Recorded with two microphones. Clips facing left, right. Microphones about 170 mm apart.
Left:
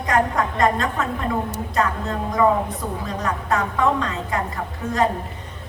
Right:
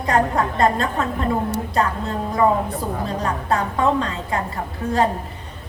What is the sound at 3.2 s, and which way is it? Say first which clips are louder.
A woman's voice: left 1 dB; 30° right (ahead or behind).